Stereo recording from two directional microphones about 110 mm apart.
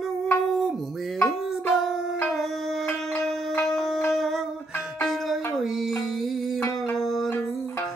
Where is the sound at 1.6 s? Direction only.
Centre (ahead or behind).